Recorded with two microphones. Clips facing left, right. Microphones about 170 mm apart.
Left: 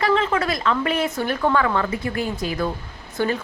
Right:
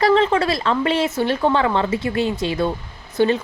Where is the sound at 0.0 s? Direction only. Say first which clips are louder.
Right 4 dB; 30° right (ahead or behind).